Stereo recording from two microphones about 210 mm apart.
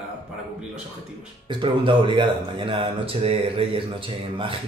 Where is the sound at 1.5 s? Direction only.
25° right (ahead or behind).